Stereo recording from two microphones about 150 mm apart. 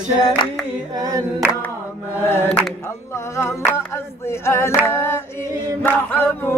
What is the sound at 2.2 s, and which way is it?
Singing, 15° left (ahead or behind).